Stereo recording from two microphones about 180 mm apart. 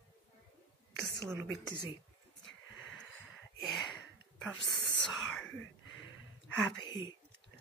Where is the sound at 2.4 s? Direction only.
90° left.